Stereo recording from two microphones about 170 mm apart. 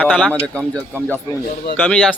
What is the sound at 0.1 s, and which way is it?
A man's voice, centre (ahead or behind).